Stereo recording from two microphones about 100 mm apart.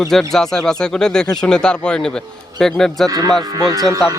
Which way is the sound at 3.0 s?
35° right (ahead or behind).